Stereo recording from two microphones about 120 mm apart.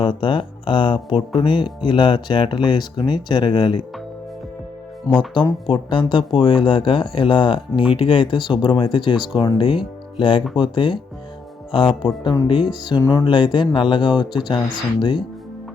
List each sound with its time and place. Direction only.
0.0 s speech: 40° left (ahead or behind)
5.3 s speech: 40° left (ahead or behind)
13.0 s music: 30° left (ahead or behind)
13.2 s speech: 40° left (ahead or behind)